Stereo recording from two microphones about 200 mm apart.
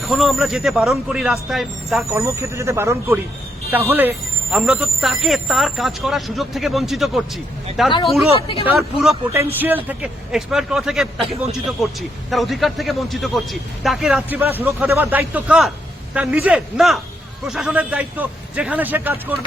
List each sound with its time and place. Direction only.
0.0 s a man's voice: centre (ahead or behind)
2.1 s a man's voice: 15° right (ahead or behind)
8.4 s speech: 30° left (ahead or behind)
8.6 s a man's voice: centre (ahead or behind)
9.3 s a man's voice: 10° right (ahead or behind)